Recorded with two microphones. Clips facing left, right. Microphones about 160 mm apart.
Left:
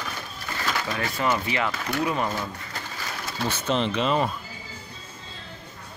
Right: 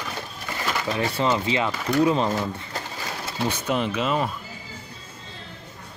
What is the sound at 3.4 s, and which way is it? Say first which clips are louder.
Speech: even; 15° right (ahead or behind).